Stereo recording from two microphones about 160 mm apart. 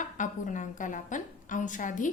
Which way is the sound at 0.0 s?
50° left (ahead or behind).